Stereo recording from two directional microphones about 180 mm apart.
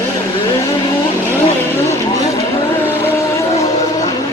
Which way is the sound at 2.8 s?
10° left (ahead or behind).